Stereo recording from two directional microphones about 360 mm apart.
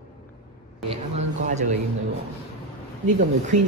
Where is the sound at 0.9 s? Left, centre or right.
Centre.